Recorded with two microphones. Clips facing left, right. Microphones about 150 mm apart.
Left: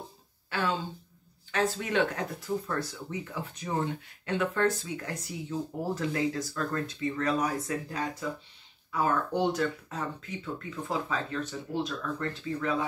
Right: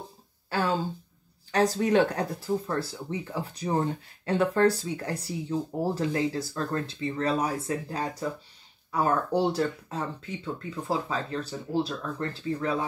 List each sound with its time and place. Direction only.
0.5 s speech: 40° right (ahead or behind)